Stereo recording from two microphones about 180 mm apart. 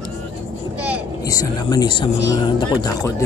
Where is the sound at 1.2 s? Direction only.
20° left (ahead or behind).